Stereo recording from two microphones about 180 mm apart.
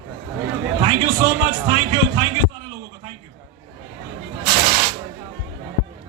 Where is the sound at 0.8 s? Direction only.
25° right (ahead or behind).